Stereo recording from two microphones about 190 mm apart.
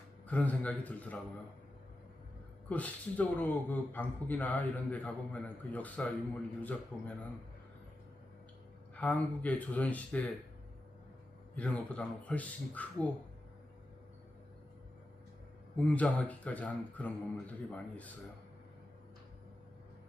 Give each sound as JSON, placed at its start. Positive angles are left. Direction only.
{"t": 0.3, "sound": "speech", "side_deg": 10}
{"t": 2.6, "sound": "speech", "side_deg": 10}
{"t": 9.0, "sound": "speech", "side_deg": 5}
{"t": 11.5, "sound": "speech", "side_deg": 5}
{"t": 15.7, "sound": "speech", "side_deg": 5}